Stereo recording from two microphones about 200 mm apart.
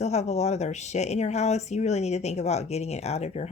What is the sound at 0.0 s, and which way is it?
Speech, 35° left (ahead or behind).